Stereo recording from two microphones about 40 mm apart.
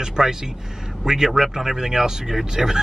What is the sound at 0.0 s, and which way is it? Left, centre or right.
Speech, centre.